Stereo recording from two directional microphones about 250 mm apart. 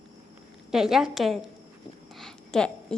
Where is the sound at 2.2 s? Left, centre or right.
Centre.